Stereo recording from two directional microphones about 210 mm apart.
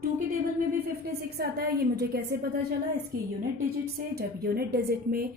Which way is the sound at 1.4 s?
50° right (ahead or behind).